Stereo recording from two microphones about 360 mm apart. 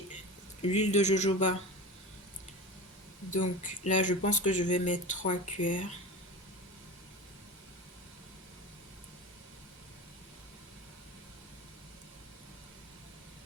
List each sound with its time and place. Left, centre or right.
0.6 s speech: centre
3.3 s speech: left
5.2 s speech: left